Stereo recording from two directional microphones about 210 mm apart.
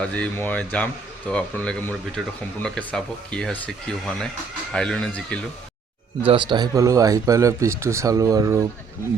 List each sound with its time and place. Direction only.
0.0 s speech: 5° left (ahead or behind)
6.2 s speech: 25° right (ahead or behind)